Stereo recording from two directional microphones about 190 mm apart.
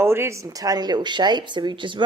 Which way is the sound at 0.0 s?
10° right (ahead or behind).